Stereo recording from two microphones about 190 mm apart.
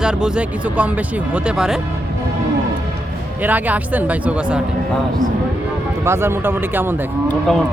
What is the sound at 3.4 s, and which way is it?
Speech, 10° right (ahead or behind).